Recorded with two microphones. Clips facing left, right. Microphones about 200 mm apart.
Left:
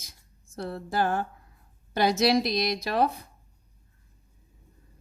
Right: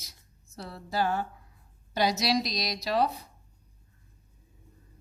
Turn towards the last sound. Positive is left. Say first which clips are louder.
# left 2 dB
turn(degrees=55)  # may be behind; listen again after turning